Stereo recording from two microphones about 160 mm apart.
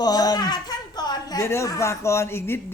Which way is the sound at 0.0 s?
25° left (ahead or behind).